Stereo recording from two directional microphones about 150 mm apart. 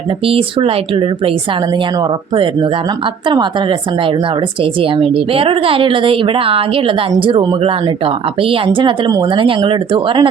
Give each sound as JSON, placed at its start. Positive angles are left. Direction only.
{"t": 0.3, "sound": "speech", "side_deg": -40}